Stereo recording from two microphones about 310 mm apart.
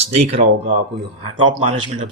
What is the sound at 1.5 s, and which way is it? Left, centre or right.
Speech, centre.